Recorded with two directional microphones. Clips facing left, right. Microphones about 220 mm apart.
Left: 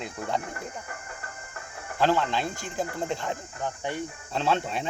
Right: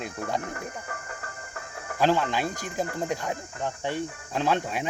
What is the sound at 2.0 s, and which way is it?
Speech, 15° right (ahead or behind).